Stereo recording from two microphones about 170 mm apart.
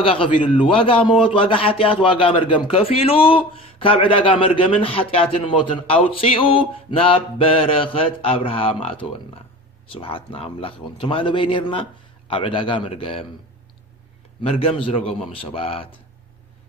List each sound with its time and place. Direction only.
0.0 s a man's voice: 30° left (ahead or behind)
14.4 s a man's voice: 35° left (ahead or behind)